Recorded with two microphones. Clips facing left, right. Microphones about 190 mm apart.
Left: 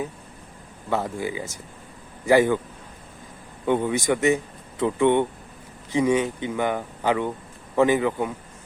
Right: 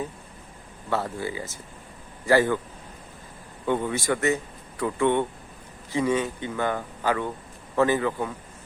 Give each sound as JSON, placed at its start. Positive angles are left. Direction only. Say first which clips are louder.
{"t": 0.9, "sound": "speech", "louder": "left 2 dB", "side_deg": 15}
{"t": 3.7, "sound": "speech", "louder": "left 3 dB", "side_deg": 15}